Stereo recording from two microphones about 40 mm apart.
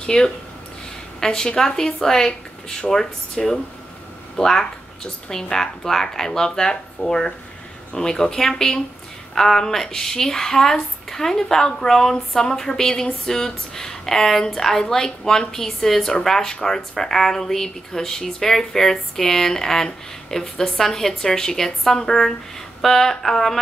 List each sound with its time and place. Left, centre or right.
0.0 s speech: left